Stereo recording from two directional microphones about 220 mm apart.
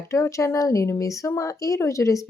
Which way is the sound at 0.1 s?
15° left (ahead or behind).